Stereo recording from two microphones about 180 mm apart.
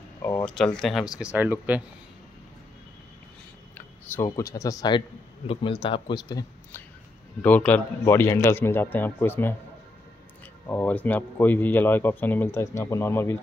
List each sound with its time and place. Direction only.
0.2 s a sound: 20° left (ahead or behind)
0.7 s speech: centre (ahead or behind)
3.7 s a man's voice: 15° left (ahead or behind)
7.4 s speech: 10° left (ahead or behind)
10.7 s speech: 10° left (ahead or behind)